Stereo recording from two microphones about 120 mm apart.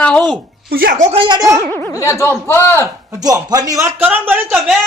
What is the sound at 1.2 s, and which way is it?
Speech, 40° right (ahead or behind).